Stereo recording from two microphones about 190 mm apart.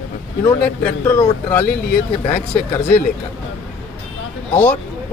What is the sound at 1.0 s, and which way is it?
Speech, 10° left (ahead or behind).